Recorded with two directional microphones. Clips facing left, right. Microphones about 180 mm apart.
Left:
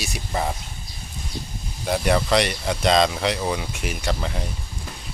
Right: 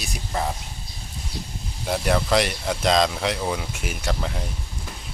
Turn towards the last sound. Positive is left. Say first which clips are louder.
# left 1 dB
turn(degrees=0)  # may be behind; listen again after turning